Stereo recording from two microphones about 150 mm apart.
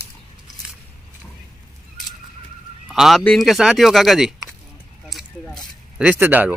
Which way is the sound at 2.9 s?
Centre (ahead or behind).